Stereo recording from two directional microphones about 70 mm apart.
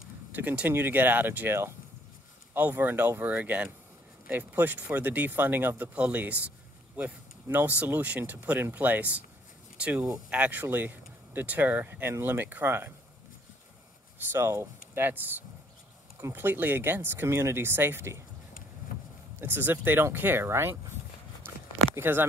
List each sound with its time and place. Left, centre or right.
0.3 s speech: right
10.3 s speech: right
14.3 s speech: right
15.0 s speech: right
19.3 s speech: right
21.9 s speech: right